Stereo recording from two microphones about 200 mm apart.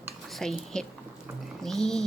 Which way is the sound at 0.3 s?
Centre (ahead or behind).